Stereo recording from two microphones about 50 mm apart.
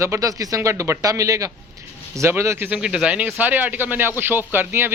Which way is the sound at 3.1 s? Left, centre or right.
Right.